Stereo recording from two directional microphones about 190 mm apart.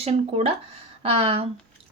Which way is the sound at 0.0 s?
30° right (ahead or behind).